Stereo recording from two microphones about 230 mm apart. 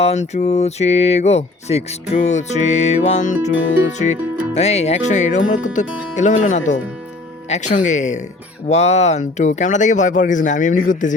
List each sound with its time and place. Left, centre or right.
0.0 s music: left
3.5 s speech: left
4.5 s music: left
5.8 s speech: left